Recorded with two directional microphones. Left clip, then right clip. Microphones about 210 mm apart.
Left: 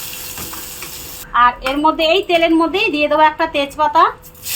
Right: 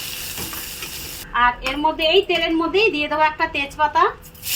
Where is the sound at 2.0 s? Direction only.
50° left (ahead or behind).